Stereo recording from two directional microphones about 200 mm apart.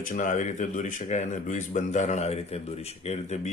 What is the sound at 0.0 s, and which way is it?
Speech, 40° left (ahead or behind).